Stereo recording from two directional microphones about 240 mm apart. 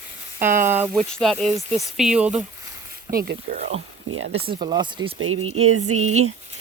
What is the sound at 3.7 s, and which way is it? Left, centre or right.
Speech, right.